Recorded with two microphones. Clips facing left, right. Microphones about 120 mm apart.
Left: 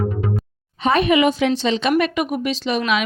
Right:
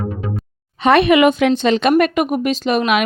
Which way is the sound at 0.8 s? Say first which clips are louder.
Right 5 dB; 75° right (ahead or behind).